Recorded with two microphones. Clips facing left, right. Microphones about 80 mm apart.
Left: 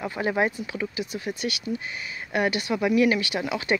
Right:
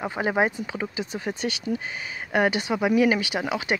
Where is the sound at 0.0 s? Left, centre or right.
Right.